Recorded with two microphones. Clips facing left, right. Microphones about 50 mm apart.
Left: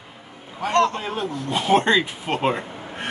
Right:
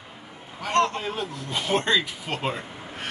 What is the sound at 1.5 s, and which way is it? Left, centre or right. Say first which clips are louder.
Speech: left 6 dB; centre.